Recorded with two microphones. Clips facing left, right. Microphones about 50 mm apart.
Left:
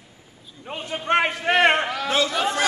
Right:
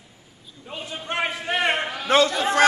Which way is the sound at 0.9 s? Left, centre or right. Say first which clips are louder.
Left 6 dB; left.